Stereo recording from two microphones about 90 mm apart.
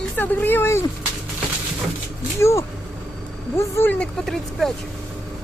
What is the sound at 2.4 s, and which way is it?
Speech, 30° left (ahead or behind).